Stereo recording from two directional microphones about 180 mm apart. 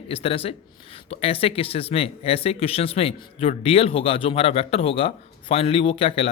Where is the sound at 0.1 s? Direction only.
30° left (ahead or behind).